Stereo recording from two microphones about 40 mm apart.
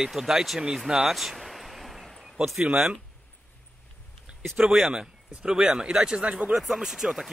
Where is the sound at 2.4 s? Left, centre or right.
Right.